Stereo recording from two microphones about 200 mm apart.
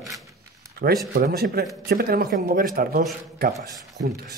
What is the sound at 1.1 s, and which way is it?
Speech, 50° right (ahead or behind).